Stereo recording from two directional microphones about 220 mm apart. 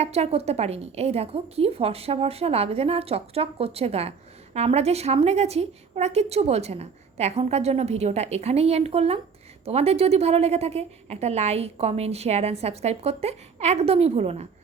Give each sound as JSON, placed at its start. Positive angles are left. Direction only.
{"t": 0.0, "sound": "a woman's voice", "side_deg": -30}